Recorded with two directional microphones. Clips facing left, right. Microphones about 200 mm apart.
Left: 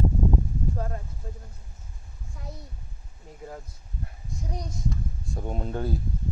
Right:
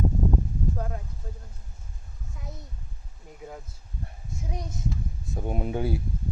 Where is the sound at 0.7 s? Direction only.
Centre (ahead or behind).